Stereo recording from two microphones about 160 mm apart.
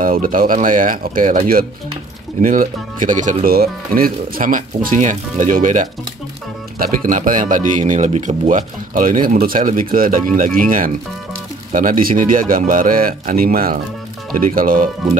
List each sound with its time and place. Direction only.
0.0 s speech: 60° right (ahead or behind)
2.4 s speech: 60° right (ahead or behind)
3.4 s speech: 65° right (ahead or behind)